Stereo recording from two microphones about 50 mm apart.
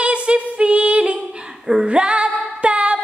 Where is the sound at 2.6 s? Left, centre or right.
Right.